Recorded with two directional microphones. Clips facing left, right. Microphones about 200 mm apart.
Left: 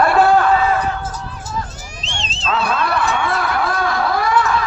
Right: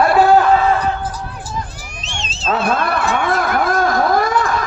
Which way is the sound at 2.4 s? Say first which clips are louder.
Right 2 dB; 50° right (ahead or behind).